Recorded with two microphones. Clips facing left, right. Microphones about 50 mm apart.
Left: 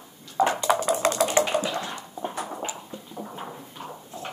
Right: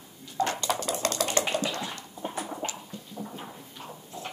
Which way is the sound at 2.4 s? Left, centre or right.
Centre.